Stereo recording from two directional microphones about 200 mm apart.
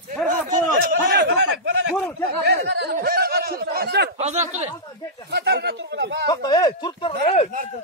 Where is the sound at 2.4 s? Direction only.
55° right (ahead or behind).